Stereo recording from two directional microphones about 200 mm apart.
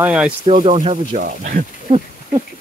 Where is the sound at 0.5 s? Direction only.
35° right (ahead or behind).